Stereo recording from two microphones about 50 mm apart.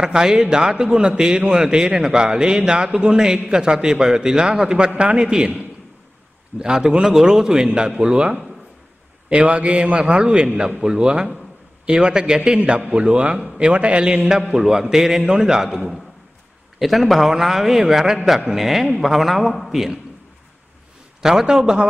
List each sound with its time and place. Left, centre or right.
0.0 s a man's voice: centre
6.6 s a man's voice: centre
14.5 s a man's voice: centre
21.2 s a man's voice: centre